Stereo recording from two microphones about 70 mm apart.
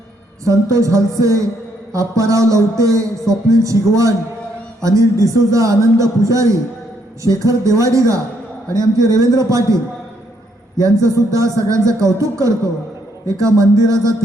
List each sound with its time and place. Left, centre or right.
0.4 s a man's voice: right
10.8 s a man's voice: right